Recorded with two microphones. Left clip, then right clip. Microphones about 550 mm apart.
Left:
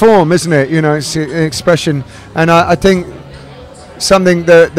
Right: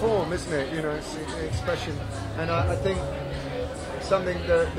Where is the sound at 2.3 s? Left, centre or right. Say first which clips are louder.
Left 19 dB; left.